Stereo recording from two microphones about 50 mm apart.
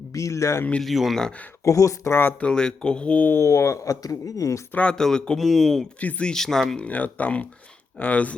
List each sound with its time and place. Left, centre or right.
0.1 s speech: left
0.8 s speech: centre
1.6 s speech: left
2.4 s speech: centre
3.3 s speech: left
4.7 s speech: left
4.9 s speech: centre
5.4 s speech: centre
6.0 s speech: left
6.2 s speech: centre
6.8 s speech: left